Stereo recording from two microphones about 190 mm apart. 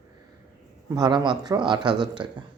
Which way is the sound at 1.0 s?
25° right (ahead or behind).